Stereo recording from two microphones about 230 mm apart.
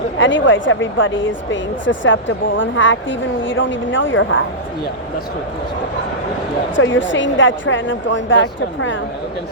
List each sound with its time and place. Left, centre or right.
0.2 s speech: left
6.7 s speech: left